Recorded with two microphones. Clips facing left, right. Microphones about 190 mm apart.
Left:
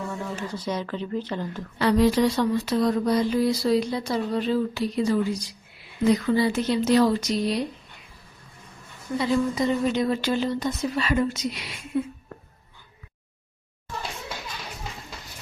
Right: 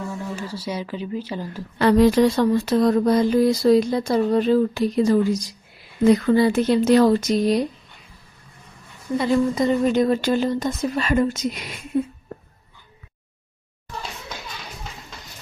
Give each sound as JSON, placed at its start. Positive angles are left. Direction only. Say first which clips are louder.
{"t": 0.4, "sound": "speech", "louder": "even", "side_deg": -10}
{"t": 1.8, "sound": "speech", "louder": "right 5 dB", "side_deg": -50}
{"t": 9.1, "sound": "speech", "louder": "right 4 dB", "side_deg": -50}